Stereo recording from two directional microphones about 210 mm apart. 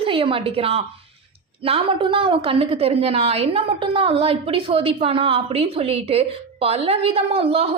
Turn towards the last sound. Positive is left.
turn(degrees=-30)  # may be behind; listen again after turning